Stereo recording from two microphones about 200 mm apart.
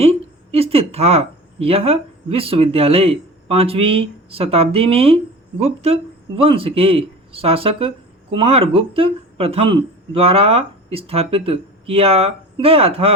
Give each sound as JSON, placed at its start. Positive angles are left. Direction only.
{"t": 0.0, "sound": "a woman's voice", "side_deg": -30}